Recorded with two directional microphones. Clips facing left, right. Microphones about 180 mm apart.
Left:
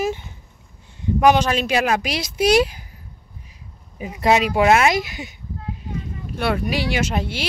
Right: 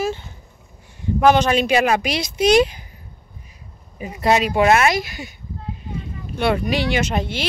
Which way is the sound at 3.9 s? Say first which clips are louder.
Even; 5° left (ahead or behind).